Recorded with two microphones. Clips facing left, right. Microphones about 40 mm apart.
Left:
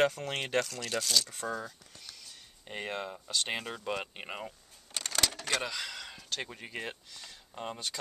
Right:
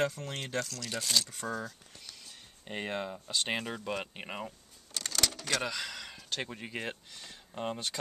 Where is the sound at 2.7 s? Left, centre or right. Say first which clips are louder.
Right 1 dB; centre.